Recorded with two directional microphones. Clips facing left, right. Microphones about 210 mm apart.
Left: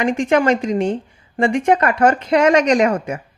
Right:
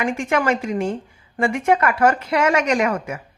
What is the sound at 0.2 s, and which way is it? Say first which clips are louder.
A woman's voice: left 5 dB; 30° left (ahead or behind).